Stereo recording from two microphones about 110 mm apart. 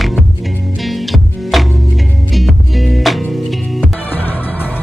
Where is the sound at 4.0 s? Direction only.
15° left (ahead or behind).